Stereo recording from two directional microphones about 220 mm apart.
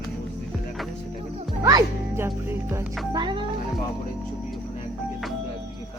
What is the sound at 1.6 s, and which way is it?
A child's voice, 15° right (ahead or behind).